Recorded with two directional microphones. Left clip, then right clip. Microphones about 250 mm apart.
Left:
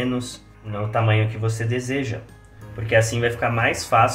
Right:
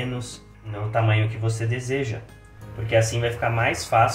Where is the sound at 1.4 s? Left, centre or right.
Left.